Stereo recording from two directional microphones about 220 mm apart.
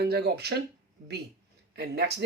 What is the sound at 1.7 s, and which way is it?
Speech, 50° right (ahead or behind).